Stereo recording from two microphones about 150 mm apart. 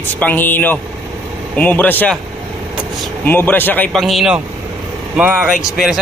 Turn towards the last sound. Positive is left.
turn(degrees=-10)  # may be behind; listen again after turning